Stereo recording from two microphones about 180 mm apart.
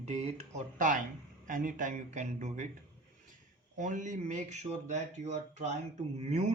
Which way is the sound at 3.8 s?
45° right (ahead or behind).